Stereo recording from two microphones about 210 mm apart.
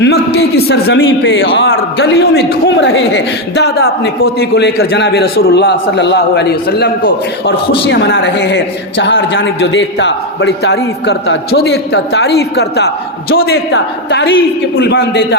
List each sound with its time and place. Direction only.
0.0 s a woman's voice: 50° left (ahead or behind)